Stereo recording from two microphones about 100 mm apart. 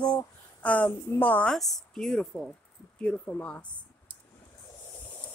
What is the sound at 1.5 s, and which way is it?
Speech, centre (ahead or behind).